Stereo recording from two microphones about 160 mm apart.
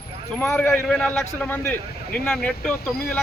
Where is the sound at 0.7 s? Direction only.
5° left (ahead or behind).